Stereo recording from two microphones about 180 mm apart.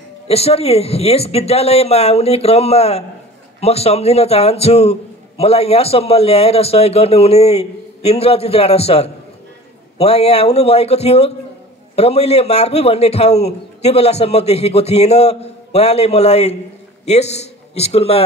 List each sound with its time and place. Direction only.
0.3 s a man's voice: 35° left (ahead or behind)